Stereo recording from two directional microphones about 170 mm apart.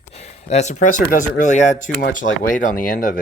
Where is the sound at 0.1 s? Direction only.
40° left (ahead or behind).